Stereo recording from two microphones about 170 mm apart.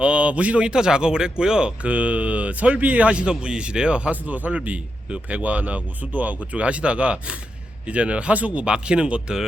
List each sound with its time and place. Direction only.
0.0 s speech: 5° right (ahead or behind)